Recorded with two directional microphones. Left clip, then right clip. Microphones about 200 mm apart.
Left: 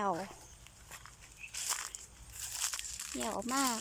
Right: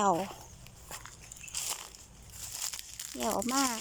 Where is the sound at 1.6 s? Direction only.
20° right (ahead or behind).